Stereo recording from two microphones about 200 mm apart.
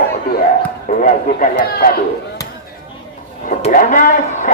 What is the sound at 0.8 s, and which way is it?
Speech, 40° left (ahead or behind).